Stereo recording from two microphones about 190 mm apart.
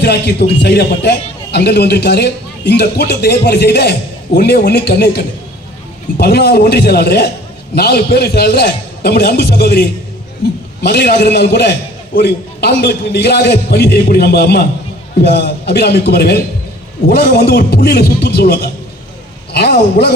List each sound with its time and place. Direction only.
0.0 s a man's voice: 60° left (ahead or behind)